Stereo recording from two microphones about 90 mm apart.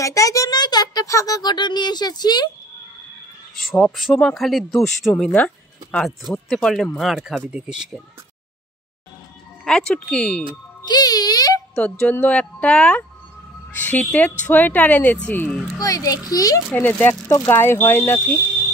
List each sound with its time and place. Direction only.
0.0 s a sound: 35° left (ahead or behind)
1.0 s speech: 35° left (ahead or behind)
3.9 s speech: 5° left (ahead or behind)
5.3 s speech: 15° left (ahead or behind); by 8.0 s 5° right (ahead or behind)
9.7 s speech: 10° left (ahead or behind)
10.9 s music: 45° left (ahead or behind)
11.7 s speech: 10° left (ahead or behind)
15.8 s a child's voice: 40° left (ahead or behind)
16.7 s speech: 20° left (ahead or behind)